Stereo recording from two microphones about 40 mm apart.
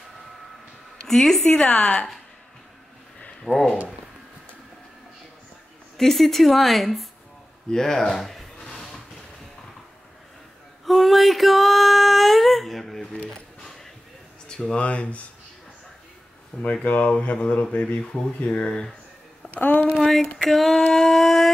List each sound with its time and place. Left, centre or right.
1.0 s speech: centre
1.4 s a woman's voice: left
3.4 s speech: centre
5.9 s speech: centre
7.7 s speech: centre
8.5 s a sound: centre
10.9 s a sound: centre
14.8 s speech: left
16.8 s speech: left
17.1 s speech: left
18.5 s a woman's voice: left
19.5 s speech: left
20.0 s a sound: centre
20.4 s speech: centre